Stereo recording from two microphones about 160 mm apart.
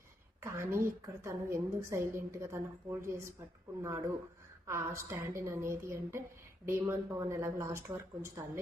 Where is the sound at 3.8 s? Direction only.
20° right (ahead or behind).